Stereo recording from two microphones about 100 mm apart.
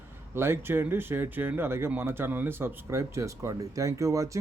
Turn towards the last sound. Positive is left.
turn(degrees=-30)  # may be behind; listen again after turning